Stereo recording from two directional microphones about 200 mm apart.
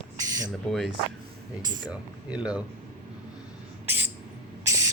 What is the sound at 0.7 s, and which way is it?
Speech, centre (ahead or behind).